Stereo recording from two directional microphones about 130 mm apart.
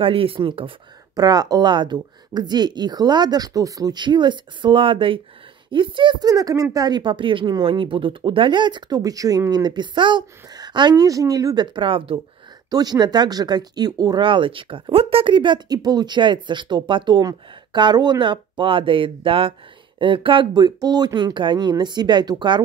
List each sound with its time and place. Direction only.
0.0 s speech: 45° right (ahead or behind)
1.1 s speech: 30° right (ahead or behind)
12.6 s speech: 30° right (ahead or behind)